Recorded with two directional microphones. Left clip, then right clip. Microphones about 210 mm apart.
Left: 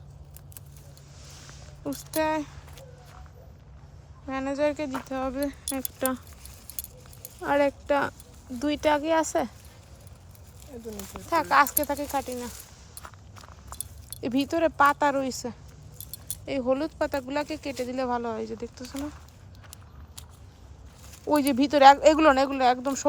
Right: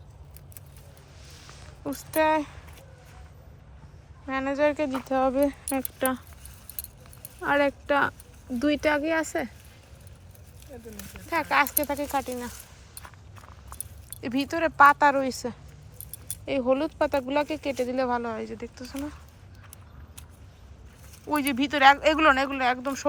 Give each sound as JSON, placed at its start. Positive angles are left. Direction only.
{"t": 1.8, "sound": "speech", "side_deg": 10}
{"t": 4.3, "sound": "speech", "side_deg": 5}
{"t": 7.4, "sound": "speech", "side_deg": 0}
{"t": 11.3, "sound": "speech", "side_deg": 5}
{"t": 14.2, "sound": "speech", "side_deg": 15}
{"t": 21.2, "sound": "speech", "side_deg": 20}